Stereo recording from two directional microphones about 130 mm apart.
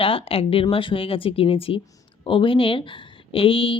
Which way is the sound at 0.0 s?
45° left (ahead or behind).